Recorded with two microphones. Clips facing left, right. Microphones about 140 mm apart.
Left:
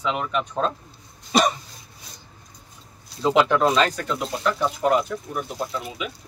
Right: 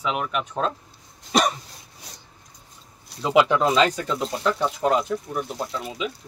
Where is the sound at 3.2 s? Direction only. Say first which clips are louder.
Even; 10° right (ahead or behind).